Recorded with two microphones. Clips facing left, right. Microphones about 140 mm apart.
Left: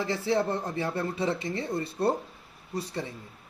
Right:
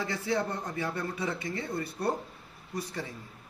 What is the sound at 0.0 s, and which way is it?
Speech, 25° left (ahead or behind).